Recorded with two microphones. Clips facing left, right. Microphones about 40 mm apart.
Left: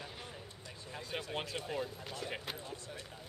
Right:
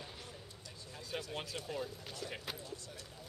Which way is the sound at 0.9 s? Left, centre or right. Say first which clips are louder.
Left 2 dB; left.